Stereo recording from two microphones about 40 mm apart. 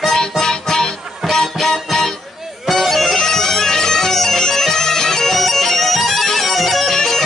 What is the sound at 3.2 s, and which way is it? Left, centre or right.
Bagpipes, centre.